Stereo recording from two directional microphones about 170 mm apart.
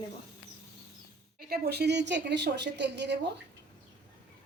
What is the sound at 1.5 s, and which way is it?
A woman's voice, 70° right (ahead or behind).